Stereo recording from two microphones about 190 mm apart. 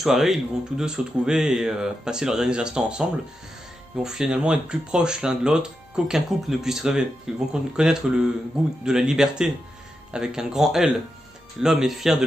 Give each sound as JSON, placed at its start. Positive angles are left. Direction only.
{"t": 0.0, "sound": "speech", "side_deg": 0}